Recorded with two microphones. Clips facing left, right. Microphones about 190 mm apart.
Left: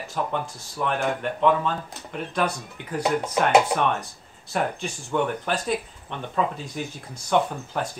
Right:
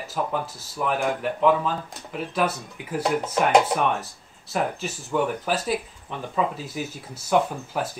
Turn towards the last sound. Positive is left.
turn(degrees=-5)  # may be behind; listen again after turning